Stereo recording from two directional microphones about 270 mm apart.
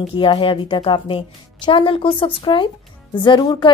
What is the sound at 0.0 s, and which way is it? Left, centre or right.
Speech, centre.